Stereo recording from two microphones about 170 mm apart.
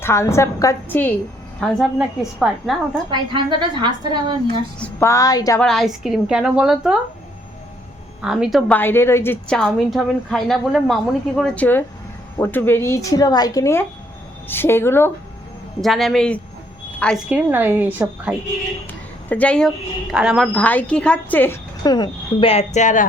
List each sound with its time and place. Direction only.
0.0 s a woman's voice: 15° left (ahead or behind)
1.6 s a woman's voice: centre (ahead or behind)
3.1 s a woman's voice: 25° right (ahead or behind)
4.8 s speech: 15° left (ahead or behind)
5.5 s a woman's voice: 5° left (ahead or behind)
8.2 s a woman's voice: 5° right (ahead or behind); by 15.1 s 15° left (ahead or behind)
15.8 s a woman's voice: centre (ahead or behind)
17.2 s a woman's voice: 10° right (ahead or behind)
19.3 s a woman's voice: 10° left (ahead or behind); by 23.0 s 45° left (ahead or behind)